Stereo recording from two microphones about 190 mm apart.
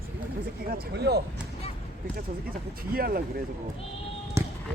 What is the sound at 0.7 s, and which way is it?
Speech, 60° right (ahead or behind).